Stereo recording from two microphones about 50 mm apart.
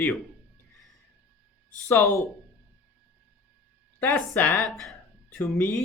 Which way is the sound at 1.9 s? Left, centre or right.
Left.